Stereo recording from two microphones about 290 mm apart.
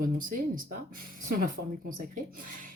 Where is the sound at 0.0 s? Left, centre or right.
Right.